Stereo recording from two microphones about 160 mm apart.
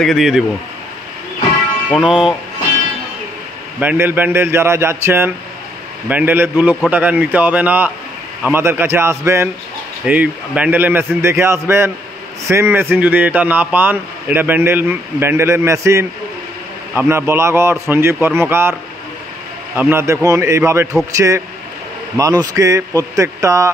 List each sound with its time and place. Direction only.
0.0 s speech: centre (ahead or behind)
2.0 s speech: 5° right (ahead or behind)
3.8 s a man's voice: 10° right (ahead or behind)
19.8 s a man's voice: 15° right (ahead or behind)
22.1 s speech: 20° right (ahead or behind)